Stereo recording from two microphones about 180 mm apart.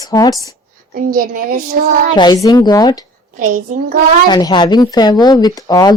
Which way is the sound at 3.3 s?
50° right (ahead or behind).